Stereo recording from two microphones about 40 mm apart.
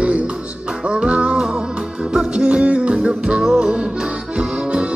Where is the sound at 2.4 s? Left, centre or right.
Right.